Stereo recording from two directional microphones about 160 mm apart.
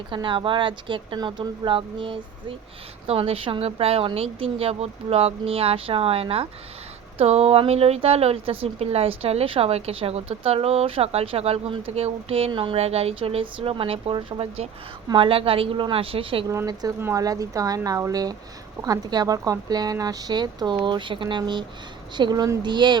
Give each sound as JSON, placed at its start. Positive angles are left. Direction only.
{"t": 0.1, "sound": "a woman's voice", "side_deg": -30}
{"t": 16.5, "sound": "speech", "side_deg": -20}